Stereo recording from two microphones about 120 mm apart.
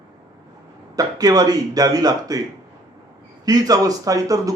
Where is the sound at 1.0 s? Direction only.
35° right (ahead or behind).